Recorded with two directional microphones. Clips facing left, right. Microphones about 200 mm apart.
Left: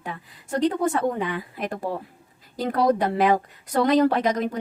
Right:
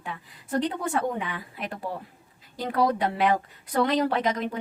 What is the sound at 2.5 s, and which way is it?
A woman's voice, 45° left (ahead or behind).